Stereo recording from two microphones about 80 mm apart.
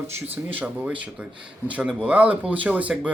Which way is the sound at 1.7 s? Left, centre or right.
Centre.